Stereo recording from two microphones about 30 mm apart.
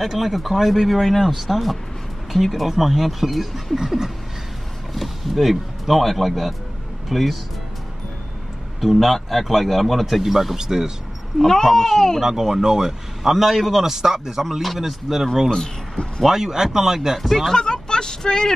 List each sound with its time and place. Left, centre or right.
0.0 s a man's voice: centre
4.9 s speech: centre
8.8 s a man's voice: centre
10.6 s speech: right
11.3 s speech: centre
12.2 s a man's voice: centre
14.4 s a man's voice: centre
15.5 s speech: left
16.3 s a man's voice: centre
17.6 s vehicle: left